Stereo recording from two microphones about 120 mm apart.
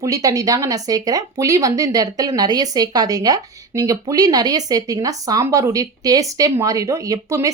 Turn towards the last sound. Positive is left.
turn(degrees=-25)  # may be behind; listen again after turning